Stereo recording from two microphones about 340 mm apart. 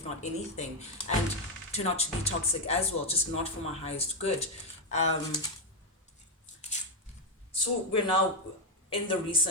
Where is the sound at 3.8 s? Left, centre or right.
Centre.